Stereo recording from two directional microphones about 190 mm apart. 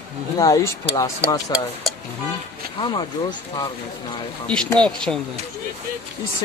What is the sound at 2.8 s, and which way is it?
Speech, 25° left (ahead or behind).